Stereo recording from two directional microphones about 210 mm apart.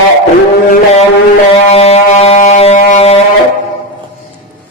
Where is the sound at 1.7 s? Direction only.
30° left (ahead or behind).